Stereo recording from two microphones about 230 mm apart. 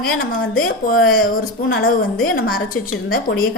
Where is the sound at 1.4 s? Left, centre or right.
Left.